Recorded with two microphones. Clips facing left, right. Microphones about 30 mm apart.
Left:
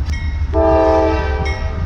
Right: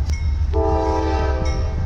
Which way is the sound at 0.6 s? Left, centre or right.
Left.